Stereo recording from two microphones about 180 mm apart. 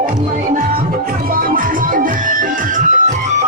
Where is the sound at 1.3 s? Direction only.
50° right (ahead or behind).